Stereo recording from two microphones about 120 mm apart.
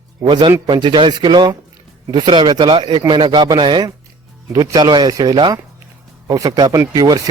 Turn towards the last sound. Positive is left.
turn(degrees=-30)  # may be behind; listen again after turning